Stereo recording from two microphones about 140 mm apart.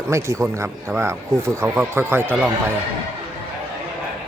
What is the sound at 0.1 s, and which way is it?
A man's voice, 20° right (ahead or behind).